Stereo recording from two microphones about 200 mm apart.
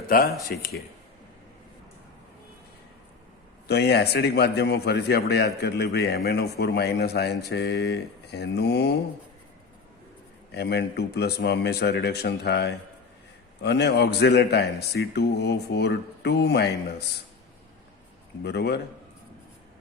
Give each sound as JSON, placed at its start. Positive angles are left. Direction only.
{"t": 0.1, "sound": "speech", "side_deg": 45}
{"t": 3.7, "sound": "a man's voice", "side_deg": 55}
{"t": 10.5, "sound": "a man's voice", "side_deg": 55}
{"t": 18.4, "sound": "a man's voice", "side_deg": 55}